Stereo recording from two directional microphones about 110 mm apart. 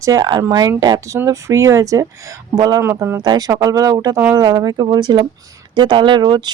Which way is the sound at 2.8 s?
20° right (ahead or behind).